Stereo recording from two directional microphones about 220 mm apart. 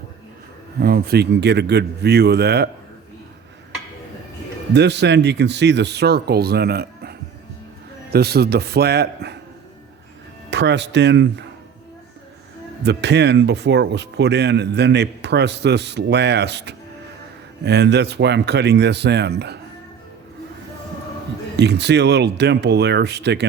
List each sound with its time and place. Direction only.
0.8 s speech: 45° right (ahead or behind)
4.7 s speech: 50° right (ahead or behind)
10.5 s speech: 50° right (ahead or behind)
12.8 s speech: 50° right (ahead or behind)
21.5 s speech: 50° right (ahead or behind)